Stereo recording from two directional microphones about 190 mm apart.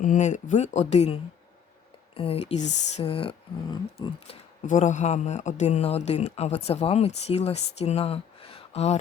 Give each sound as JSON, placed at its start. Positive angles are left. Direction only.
{"t": 0.0, "sound": "speech", "side_deg": 40}